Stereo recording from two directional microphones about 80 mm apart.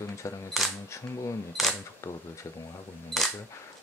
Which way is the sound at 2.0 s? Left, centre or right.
Left.